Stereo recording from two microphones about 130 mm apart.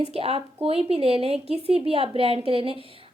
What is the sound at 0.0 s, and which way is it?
Speech, 50° right (ahead or behind).